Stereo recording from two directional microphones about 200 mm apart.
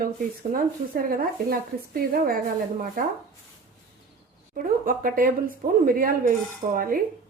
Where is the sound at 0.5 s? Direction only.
45° right (ahead or behind).